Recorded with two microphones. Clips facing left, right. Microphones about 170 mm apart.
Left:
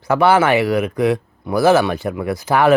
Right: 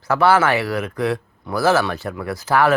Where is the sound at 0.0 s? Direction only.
20° left (ahead or behind).